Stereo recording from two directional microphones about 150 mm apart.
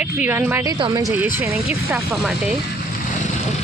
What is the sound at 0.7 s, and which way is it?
Speech, 30° right (ahead or behind).